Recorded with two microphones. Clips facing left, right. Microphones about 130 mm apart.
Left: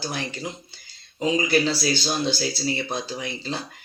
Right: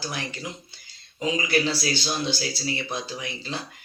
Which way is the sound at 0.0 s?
30° left (ahead or behind).